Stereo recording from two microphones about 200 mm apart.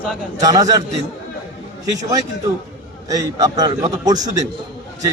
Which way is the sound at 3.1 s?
20° right (ahead or behind).